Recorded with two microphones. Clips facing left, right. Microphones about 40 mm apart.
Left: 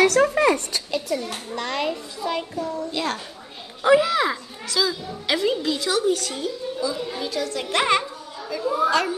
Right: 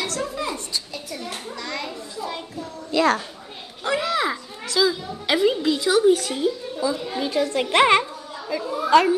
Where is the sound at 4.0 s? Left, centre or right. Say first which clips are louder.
Left 2 dB; centre.